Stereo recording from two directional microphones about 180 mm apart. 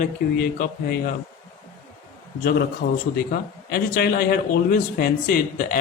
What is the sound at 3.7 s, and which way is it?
A man's voice, 60° left (ahead or behind).